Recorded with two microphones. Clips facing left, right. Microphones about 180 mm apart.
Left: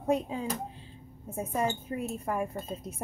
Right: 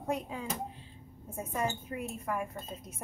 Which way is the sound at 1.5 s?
30° left (ahead or behind).